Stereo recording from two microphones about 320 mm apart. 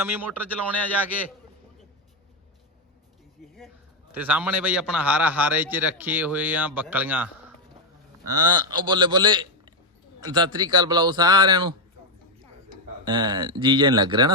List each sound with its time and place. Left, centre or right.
0.0 s a man's voice: centre
4.1 s a man's voice: centre
13.1 s a man's voice: centre